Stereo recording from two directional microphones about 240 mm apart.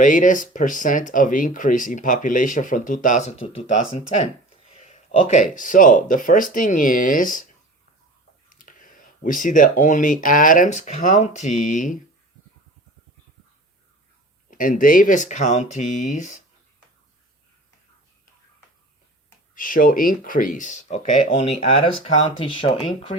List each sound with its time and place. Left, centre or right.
0.0 s speech: left
8.4 s speech: left
14.5 s speech: left
19.5 s speech: left